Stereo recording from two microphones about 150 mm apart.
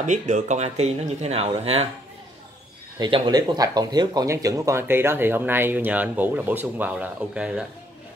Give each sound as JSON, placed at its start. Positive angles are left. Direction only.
{"t": 0.0, "sound": "speech", "side_deg": -55}
{"t": 3.0, "sound": "speech", "side_deg": -30}